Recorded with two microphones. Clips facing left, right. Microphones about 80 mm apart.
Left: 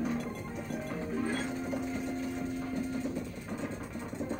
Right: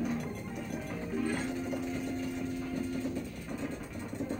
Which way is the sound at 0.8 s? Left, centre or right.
Centre.